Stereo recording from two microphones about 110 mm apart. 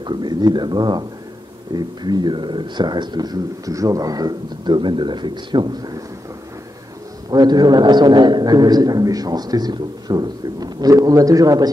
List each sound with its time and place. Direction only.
0.0 s a man's voice: 40° right (ahead or behind)
7.2 s a man's voice: 40° right (ahead or behind)